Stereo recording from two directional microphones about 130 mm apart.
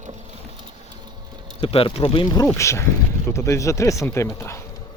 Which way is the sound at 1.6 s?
45° left (ahead or behind).